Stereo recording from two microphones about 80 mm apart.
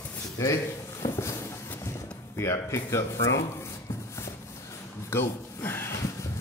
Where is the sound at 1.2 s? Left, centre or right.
Left.